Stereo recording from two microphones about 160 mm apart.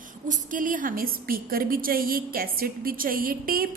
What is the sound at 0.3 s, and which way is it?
A woman's voice, 55° right (ahead or behind).